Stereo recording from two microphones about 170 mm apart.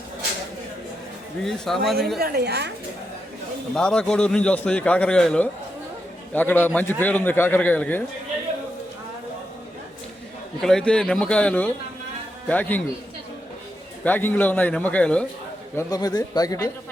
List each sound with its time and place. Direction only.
1.5 s a man's voice: centre (ahead or behind)
2.1 s a woman's voice: 70° right (ahead or behind)
3.8 s a man's voice: 5° left (ahead or behind)
10.6 s a man's voice: 5° left (ahead or behind)
14.0 s a man's voice: 10° left (ahead or behind)
15.7 s speech: 20° left (ahead or behind)